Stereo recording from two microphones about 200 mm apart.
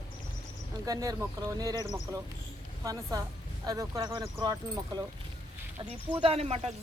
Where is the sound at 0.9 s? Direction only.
15° right (ahead or behind).